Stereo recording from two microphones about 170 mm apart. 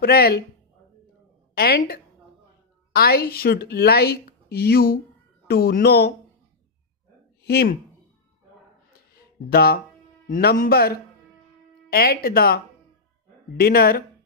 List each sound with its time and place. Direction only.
0.0 s speech: 65° left (ahead or behind)
1.5 s a woman's voice: 65° left (ahead or behind)
7.4 s speech: 65° left (ahead or behind)
9.1 s a sound: 65° left (ahead or behind)
10.2 s speech: 55° left (ahead or behind)